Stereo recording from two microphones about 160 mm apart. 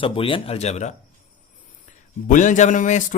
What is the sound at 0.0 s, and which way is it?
A man's voice, 35° left (ahead or behind).